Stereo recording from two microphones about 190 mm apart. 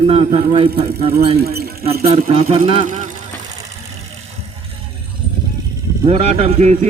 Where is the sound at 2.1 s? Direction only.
30° right (ahead or behind).